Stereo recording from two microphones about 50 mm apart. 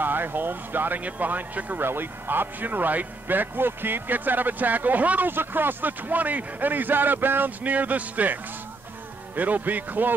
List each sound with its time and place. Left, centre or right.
0.0 s a man's voice: right
1.9 s a man's voice: right
5.3 s a man's voice: right